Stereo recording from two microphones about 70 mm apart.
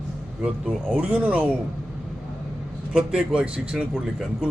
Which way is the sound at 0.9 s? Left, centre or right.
Centre.